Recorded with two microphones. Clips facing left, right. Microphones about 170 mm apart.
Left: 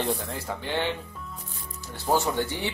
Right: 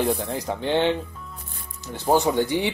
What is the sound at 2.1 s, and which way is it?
Speech, 15° right (ahead or behind).